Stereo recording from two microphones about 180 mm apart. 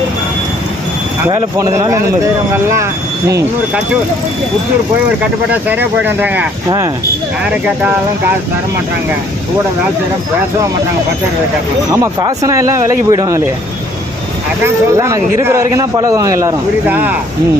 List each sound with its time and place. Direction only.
1.3 s a man's voice: 15° right (ahead or behind)
5.5 s a man's voice: 10° right (ahead or behind)
11.9 s a man's voice: 20° right (ahead or behind)
14.6 s a man's voice: 15° right (ahead or behind)